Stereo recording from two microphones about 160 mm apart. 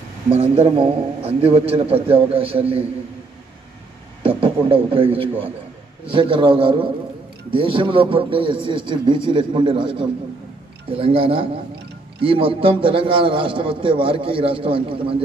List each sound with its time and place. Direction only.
0.3 s a man's voice: 40° right (ahead or behind)
4.2 s a man's voice: 35° right (ahead or behind)